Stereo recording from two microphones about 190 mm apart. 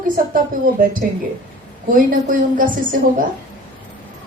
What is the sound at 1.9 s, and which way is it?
A woman's voice, 45° right (ahead or behind).